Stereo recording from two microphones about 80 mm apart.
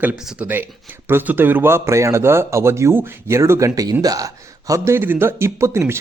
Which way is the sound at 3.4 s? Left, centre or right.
Right.